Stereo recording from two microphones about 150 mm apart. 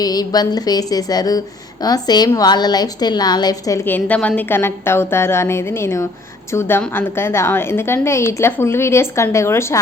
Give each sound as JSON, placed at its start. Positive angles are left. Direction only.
{"t": 0.0, "sound": "a woman's voice", "side_deg": 25}